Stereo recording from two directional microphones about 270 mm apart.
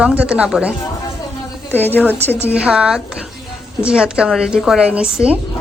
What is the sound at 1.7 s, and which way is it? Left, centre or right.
Speech, centre.